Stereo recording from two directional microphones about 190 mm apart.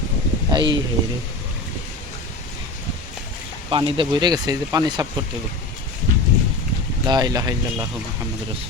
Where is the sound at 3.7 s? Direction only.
25° right (ahead or behind).